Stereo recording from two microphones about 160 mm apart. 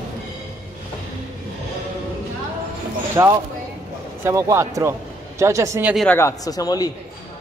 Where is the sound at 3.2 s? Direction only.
20° right (ahead or behind).